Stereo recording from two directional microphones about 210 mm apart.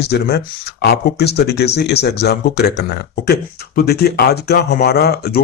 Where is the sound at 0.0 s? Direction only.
50° left (ahead or behind).